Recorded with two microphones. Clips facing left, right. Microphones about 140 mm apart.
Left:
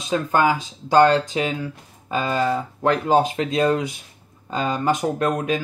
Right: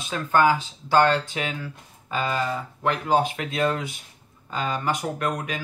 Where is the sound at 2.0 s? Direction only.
25° left (ahead or behind).